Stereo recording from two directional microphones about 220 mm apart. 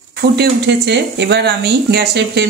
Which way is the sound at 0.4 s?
50° right (ahead or behind).